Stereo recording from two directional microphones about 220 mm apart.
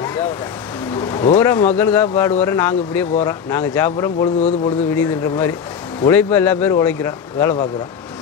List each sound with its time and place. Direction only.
0.9 s speech: 15° left (ahead or behind)
4.4 s speech: 30° left (ahead or behind)
5.0 s speech: 15° left (ahead or behind)